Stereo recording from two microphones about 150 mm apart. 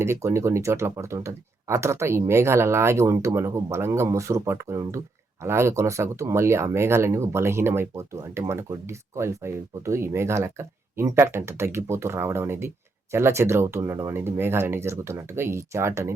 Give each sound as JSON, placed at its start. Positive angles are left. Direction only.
{"t": 0.0, "sound": "speech", "side_deg": -20}